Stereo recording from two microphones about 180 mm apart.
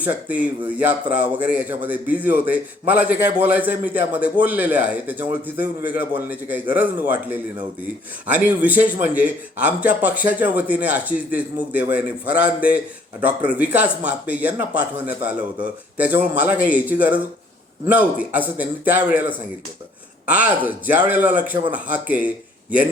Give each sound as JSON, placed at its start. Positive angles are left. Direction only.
{"t": 0.0, "sound": "speech", "side_deg": -10}
{"t": 20.2, "sound": "speech", "side_deg": -10}